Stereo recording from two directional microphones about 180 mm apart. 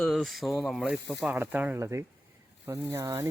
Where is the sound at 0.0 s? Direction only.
Centre (ahead or behind).